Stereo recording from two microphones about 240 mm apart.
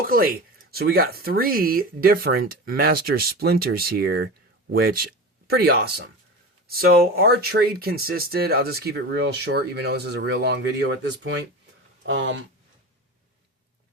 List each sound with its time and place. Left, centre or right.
0.7 s speech: right